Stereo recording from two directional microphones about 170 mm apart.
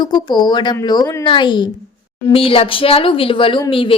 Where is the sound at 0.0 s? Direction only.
25° left (ahead or behind).